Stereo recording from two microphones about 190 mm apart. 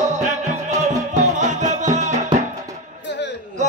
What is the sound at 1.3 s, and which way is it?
Music, 40° right (ahead or behind).